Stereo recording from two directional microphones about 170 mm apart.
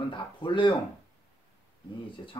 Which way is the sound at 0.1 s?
30° left (ahead or behind).